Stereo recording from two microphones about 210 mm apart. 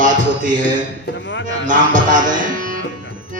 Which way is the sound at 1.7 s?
40° right (ahead or behind).